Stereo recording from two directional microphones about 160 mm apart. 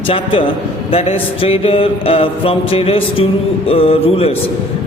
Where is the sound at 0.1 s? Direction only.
35° left (ahead or behind).